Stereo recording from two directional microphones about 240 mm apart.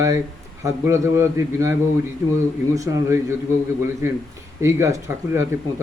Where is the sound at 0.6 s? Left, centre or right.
Centre.